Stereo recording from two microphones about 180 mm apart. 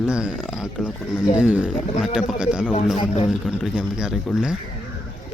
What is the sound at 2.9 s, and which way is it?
Speech, 35° left (ahead or behind).